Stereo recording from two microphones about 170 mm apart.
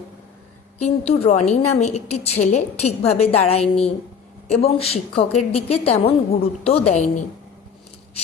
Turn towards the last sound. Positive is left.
turn(degrees=45)  # may be behind; listen again after turning